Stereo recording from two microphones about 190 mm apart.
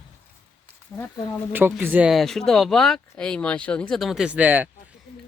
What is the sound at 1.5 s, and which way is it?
Speech, 10° right (ahead or behind).